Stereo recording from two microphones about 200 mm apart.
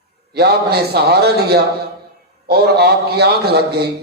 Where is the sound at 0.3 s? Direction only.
55° right (ahead or behind).